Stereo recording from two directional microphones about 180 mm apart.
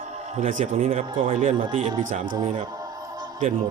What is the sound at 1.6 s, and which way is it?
Speech, 25° right (ahead or behind).